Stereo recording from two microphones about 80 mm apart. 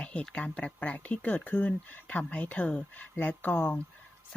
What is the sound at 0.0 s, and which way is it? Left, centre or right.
Speech, centre.